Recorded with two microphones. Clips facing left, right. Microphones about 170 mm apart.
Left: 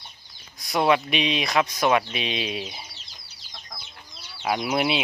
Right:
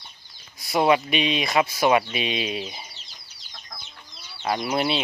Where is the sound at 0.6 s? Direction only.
5° right (ahead or behind).